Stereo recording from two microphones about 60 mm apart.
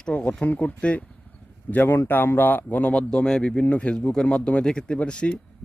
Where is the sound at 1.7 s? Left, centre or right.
Left.